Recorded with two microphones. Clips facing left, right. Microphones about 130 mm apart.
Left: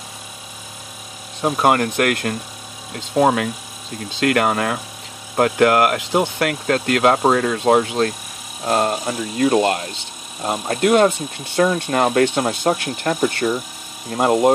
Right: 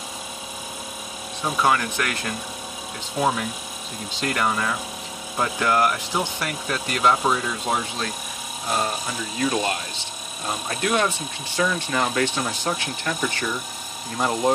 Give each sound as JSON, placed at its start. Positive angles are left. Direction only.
{"t": 1.4, "sound": "speech", "side_deg": 50}